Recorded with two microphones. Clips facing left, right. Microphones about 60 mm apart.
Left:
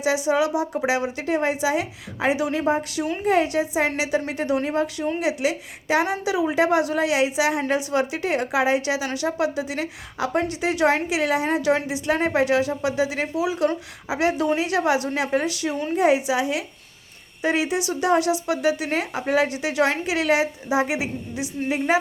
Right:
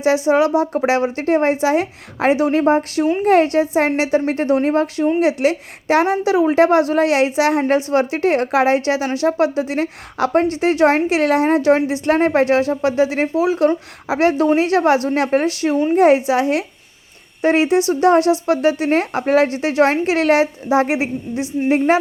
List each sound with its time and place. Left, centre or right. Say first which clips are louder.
0.0 s a woman's voice: right 6 dB; right
10.2 s a woman's voice: right 7 dB; right